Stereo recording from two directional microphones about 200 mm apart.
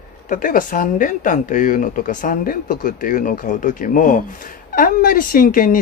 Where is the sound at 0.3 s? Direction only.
45° left (ahead or behind).